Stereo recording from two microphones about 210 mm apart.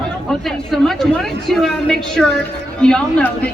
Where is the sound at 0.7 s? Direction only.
Centre (ahead or behind).